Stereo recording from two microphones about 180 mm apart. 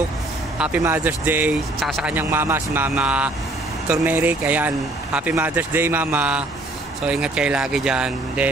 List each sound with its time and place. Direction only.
0.6 s speech: 10° right (ahead or behind)
1.8 s speech: centre (ahead or behind)
2.1 s speech: 10° right (ahead or behind)